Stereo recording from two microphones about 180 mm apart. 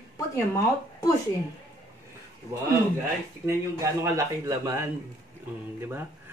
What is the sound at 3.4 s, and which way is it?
Speech, 15° right (ahead or behind).